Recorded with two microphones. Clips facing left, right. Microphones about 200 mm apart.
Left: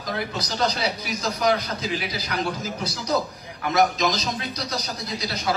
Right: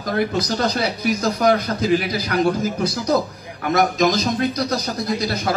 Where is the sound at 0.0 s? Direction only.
50° right (ahead or behind).